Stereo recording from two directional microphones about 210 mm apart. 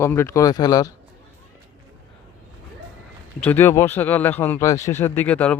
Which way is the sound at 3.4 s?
10° left (ahead or behind).